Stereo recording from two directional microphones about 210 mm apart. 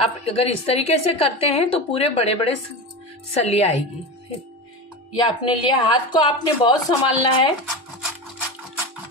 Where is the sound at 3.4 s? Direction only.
30° left (ahead or behind).